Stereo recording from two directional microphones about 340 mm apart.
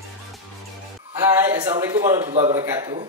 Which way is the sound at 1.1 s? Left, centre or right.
Centre.